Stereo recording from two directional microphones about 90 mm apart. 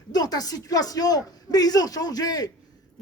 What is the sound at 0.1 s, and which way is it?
A man's voice, 45° left (ahead or behind).